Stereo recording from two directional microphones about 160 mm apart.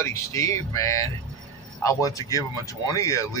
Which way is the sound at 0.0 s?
20° left (ahead or behind).